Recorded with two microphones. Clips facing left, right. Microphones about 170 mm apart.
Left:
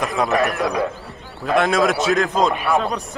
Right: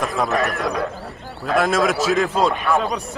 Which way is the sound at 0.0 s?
Centre (ahead or behind).